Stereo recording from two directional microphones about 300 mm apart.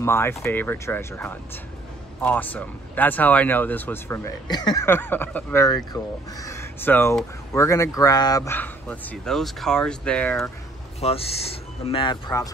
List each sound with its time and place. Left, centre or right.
0.0 s speech: centre
11.0 s speech: centre